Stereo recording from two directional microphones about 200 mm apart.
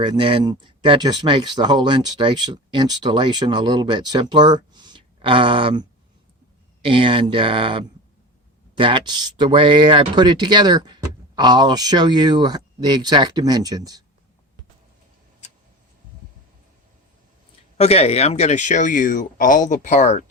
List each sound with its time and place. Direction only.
0.0 s speech: 25° right (ahead or behind)
6.8 s speech: 25° right (ahead or behind)
17.7 s speech: 30° left (ahead or behind)